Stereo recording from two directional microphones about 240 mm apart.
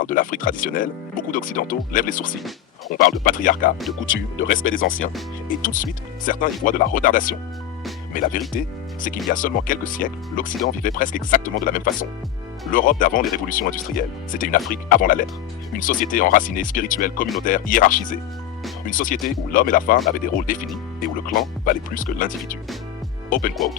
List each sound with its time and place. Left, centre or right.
0.0 s speech: left
4.0 s speech: left
5.5 s speech: left